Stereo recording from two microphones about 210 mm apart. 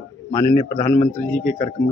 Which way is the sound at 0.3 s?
25° left (ahead or behind).